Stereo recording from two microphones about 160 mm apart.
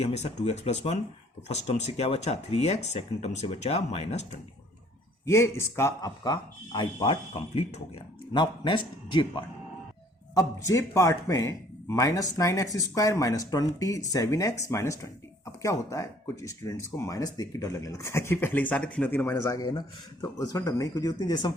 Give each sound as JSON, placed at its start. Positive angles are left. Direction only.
{"t": 0.0, "sound": "speech", "side_deg": 40}
{"t": 5.2, "sound": "speech", "side_deg": 15}
{"t": 10.3, "sound": "speech", "side_deg": 20}